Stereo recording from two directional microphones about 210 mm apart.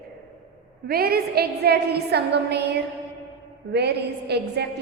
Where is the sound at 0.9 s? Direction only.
45° right (ahead or behind).